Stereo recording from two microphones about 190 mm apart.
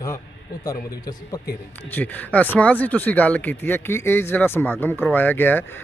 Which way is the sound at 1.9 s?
10° left (ahead or behind).